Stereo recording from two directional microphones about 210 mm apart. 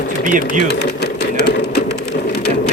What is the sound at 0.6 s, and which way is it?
Speech, 55° left (ahead or behind).